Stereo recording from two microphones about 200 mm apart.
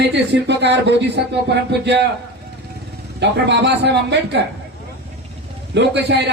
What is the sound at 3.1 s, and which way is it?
A man's voice, 60° right (ahead or behind).